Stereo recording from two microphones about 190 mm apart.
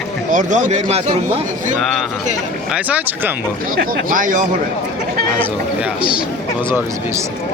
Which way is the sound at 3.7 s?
50° right (ahead or behind).